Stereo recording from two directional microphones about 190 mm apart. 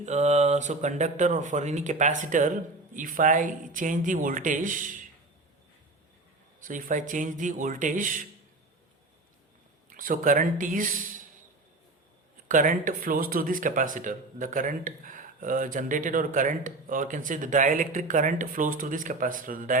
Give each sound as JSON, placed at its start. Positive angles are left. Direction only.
{"t": 0.0, "sound": "speech", "side_deg": -35}
{"t": 6.6, "sound": "speech", "side_deg": -45}
{"t": 9.9, "sound": "speech", "side_deg": -45}
{"t": 12.5, "sound": "speech", "side_deg": -45}